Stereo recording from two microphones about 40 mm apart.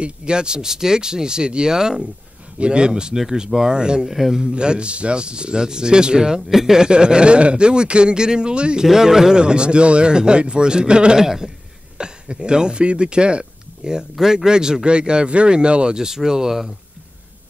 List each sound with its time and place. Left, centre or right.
0.0 s speech: right
4.1 s speech: centre
4.4 s speech: right
8.8 s speech: centre
11.2 s speech: centre
12.0 s speech: right